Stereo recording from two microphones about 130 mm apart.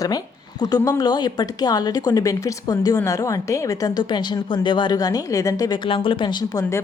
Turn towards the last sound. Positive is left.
turn(degrees=35)  # may be behind; listen again after turning